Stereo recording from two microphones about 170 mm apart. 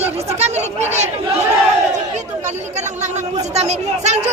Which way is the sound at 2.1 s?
40° right (ahead or behind).